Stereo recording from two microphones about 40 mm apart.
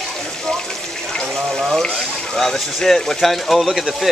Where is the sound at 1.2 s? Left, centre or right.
Centre.